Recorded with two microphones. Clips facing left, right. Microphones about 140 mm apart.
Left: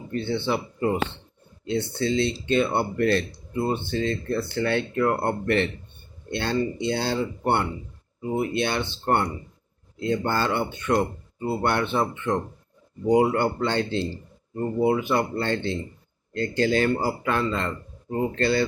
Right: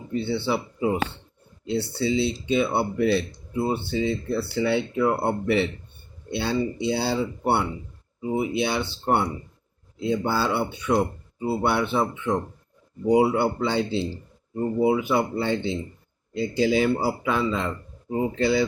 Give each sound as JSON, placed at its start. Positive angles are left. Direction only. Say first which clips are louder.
{"t": 0.1, "sound": "speech", "louder": "right 1 dB", "side_deg": -5}